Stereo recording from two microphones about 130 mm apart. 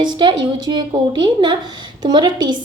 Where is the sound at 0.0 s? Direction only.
35° right (ahead or behind).